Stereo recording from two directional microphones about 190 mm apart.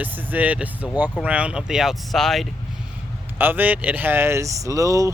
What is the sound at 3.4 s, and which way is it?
Speech, 10° right (ahead or behind).